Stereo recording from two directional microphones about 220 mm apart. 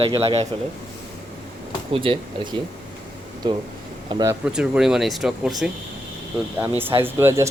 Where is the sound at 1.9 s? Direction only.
25° right (ahead or behind).